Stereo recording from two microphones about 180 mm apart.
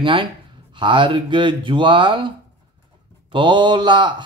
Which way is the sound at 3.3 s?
25° right (ahead or behind).